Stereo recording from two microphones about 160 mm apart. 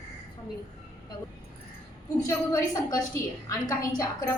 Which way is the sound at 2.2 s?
20° left (ahead or behind).